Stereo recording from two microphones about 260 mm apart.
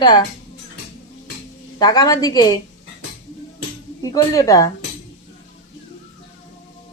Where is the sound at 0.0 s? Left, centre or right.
Centre.